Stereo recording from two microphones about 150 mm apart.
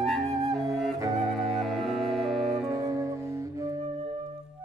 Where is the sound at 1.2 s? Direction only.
Centre (ahead or behind).